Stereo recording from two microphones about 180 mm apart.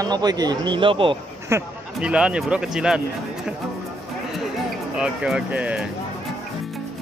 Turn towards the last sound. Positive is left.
turn(degrees=-5)  # may be behind; listen again after turning